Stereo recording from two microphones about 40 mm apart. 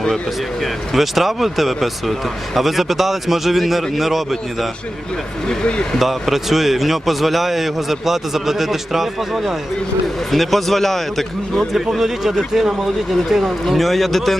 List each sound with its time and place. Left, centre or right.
0.6 s speech: centre
5.5 s speech: left
6.0 s speech: centre
11.9 s speech: centre
13.7 s speech: centre